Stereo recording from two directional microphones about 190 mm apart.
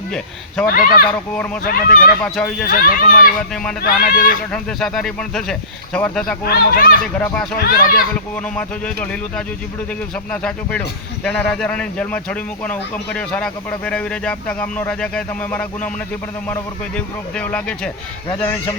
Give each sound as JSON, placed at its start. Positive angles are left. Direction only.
{"t": 0.1, "sound": "speech", "side_deg": 5}
{"t": 0.7, "sound": "speech", "side_deg": 50}
{"t": 2.2, "sound": "speech", "side_deg": 5}
{"t": 2.6, "sound": "speech", "side_deg": 45}
{"t": 3.5, "sound": "speech", "side_deg": 5}
{"t": 3.8, "sound": "speech", "side_deg": 50}
{"t": 4.5, "sound": "speech", "side_deg": 0}
{"t": 6.4, "sound": "speech", "side_deg": 50}
{"t": 7.2, "sound": "a man's voice", "side_deg": 10}
{"t": 7.6, "sound": "speech", "side_deg": 50}
{"t": 8.5, "sound": "a man's voice", "side_deg": 5}